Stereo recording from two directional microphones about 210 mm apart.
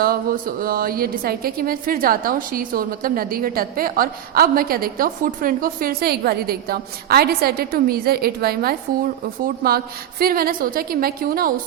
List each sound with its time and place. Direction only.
0.0 s a woman's voice: 45° right (ahead or behind)